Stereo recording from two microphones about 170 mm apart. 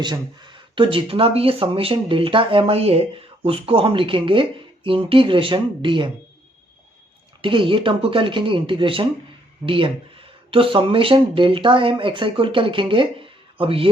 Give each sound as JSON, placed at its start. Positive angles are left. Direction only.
{"t": 0.0, "sound": "speech", "side_deg": -25}
{"t": 7.4, "sound": "speech", "side_deg": -30}